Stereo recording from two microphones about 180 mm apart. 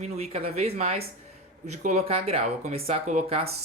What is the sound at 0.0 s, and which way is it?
Speech, 35° right (ahead or behind).